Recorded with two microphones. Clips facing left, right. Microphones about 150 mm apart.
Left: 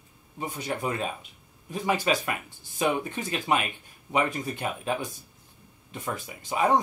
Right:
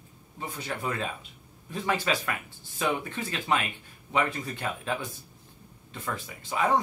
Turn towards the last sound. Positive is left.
turn(degrees=20)  # may be behind; listen again after turning